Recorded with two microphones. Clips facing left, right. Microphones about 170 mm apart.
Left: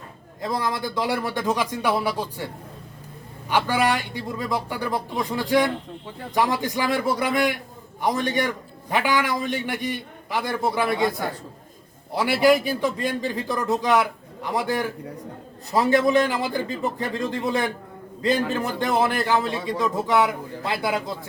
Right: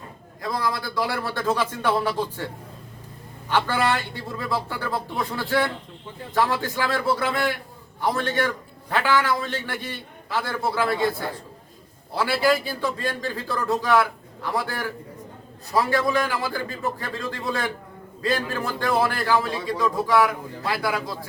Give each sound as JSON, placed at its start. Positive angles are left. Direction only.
{"t": 0.4, "sound": "a man's voice", "side_deg": 20}
{"t": 3.5, "sound": "a man's voice", "side_deg": 15}
{"t": 12.1, "sound": "a man's voice", "side_deg": 20}